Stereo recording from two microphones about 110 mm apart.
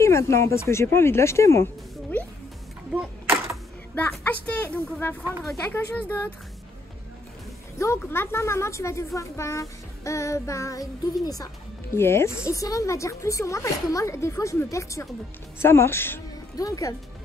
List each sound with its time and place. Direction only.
0.0 s a child's voice: 25° left (ahead or behind)
3.9 s a woman's voice: 15° left (ahead or behind)
5.7 s a woman's voice: 15° left (ahead or behind)
7.8 s a child's voice: 25° left (ahead or behind)
11.9 s a child's voice: 25° left (ahead or behind)
16.5 s speech: 30° left (ahead or behind)